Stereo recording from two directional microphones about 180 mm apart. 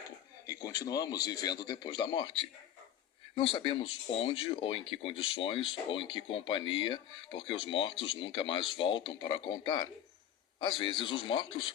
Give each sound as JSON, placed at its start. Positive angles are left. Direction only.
{"t": 0.4, "sound": "speech", "side_deg": 20}